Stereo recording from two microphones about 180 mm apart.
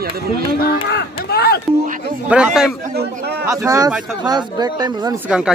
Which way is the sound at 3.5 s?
20° right (ahead or behind).